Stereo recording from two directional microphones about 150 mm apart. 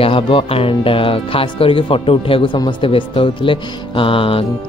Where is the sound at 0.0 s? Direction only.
35° left (ahead or behind).